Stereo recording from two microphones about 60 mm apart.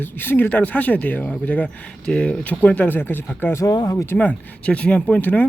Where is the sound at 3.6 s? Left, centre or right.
Left.